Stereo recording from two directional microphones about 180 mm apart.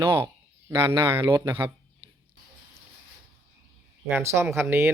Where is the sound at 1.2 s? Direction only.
25° right (ahead or behind).